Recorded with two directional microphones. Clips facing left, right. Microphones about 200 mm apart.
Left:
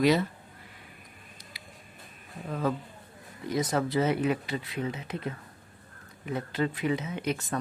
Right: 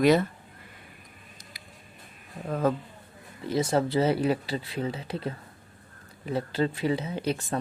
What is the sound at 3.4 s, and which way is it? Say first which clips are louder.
Speech: right 3 dB; 30° right (ahead or behind).